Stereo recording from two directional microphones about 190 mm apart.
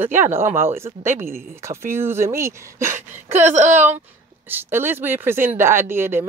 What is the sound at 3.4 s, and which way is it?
Speech, 40° right (ahead or behind).